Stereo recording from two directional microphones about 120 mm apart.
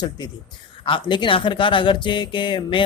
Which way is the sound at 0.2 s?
40° left (ahead or behind).